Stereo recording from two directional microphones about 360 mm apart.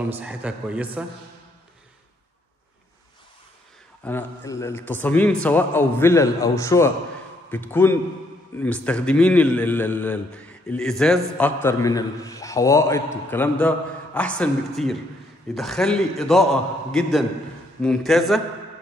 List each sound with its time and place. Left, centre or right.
0.0 s a man's voice: centre
4.0 s a man's voice: centre